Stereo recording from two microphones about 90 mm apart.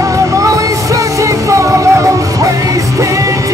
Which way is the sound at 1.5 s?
35° right (ahead or behind).